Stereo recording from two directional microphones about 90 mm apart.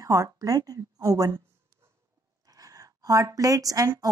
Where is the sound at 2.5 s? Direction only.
40° right (ahead or behind).